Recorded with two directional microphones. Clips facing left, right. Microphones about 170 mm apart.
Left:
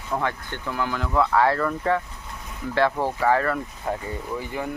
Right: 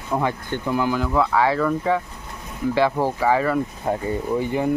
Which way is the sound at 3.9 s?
25° right (ahead or behind).